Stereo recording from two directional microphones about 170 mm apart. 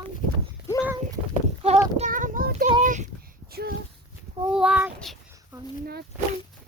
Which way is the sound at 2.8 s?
50° right (ahead or behind).